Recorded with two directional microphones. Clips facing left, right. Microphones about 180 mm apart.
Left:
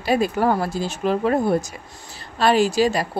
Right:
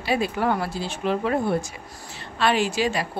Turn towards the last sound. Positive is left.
turn(degrees=40)  # may be behind; listen again after turning